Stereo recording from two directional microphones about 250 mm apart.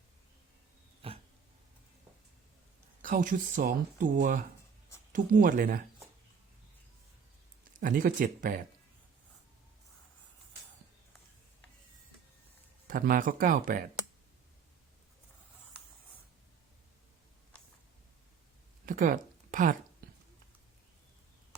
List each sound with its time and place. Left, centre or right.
1.0 s dog: right
3.0 s speech: right
7.8 s speech: right
12.9 s speech: right
18.9 s speech: right
20.0 s a sound: right